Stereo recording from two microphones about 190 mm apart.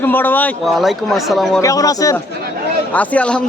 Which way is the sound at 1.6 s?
15° left (ahead or behind).